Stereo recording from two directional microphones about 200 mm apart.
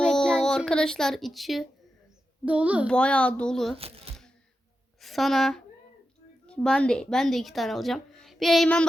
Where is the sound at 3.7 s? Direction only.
30° right (ahead or behind).